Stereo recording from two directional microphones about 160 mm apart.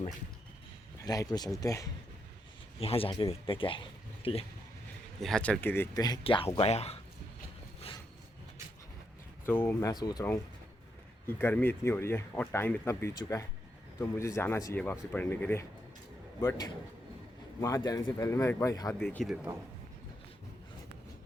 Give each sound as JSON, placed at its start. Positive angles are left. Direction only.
{"t": 1.0, "sound": "speech", "side_deg": 25}
{"t": 2.7, "sound": "speech", "side_deg": 35}
{"t": 5.2, "sound": "speech", "side_deg": 5}
{"t": 6.0, "sound": "speech", "side_deg": 30}
{"t": 9.5, "sound": "speech", "side_deg": 15}
{"t": 9.9, "sound": "speech", "side_deg": 25}
{"t": 11.3, "sound": "speech", "side_deg": 15}